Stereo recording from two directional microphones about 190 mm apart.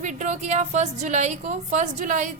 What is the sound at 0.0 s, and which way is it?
A woman's voice, 40° right (ahead or behind).